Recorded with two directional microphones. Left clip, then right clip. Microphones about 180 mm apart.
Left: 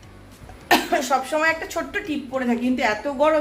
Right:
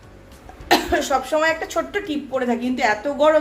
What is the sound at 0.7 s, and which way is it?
A woman's voice, centre (ahead or behind).